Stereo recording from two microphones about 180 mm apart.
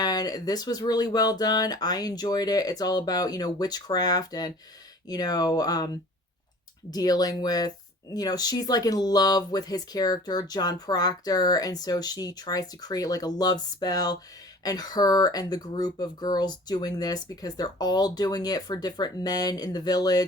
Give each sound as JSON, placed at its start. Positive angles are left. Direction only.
{"t": 0.0, "sound": "speech", "side_deg": 20}